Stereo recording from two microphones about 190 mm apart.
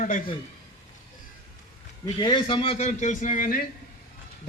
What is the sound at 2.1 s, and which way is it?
A man's voice, 25° left (ahead or behind).